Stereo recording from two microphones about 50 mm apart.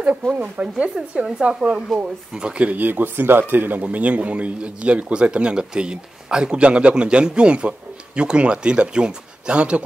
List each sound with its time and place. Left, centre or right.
0.3 s a man's voice: right
0.9 s a man's voice: centre
2.7 s a man's voice: right